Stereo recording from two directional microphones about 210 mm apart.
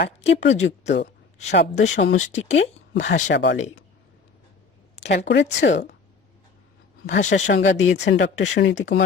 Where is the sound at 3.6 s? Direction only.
35° left (ahead or behind).